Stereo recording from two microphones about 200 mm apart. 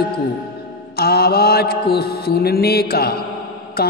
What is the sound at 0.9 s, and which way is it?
Mantra, 50° left (ahead or behind).